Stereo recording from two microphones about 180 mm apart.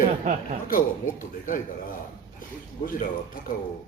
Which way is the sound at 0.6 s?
50° left (ahead or behind).